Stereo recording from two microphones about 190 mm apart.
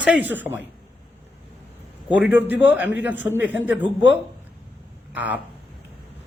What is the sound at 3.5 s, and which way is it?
Speech, 75° left (ahead or behind).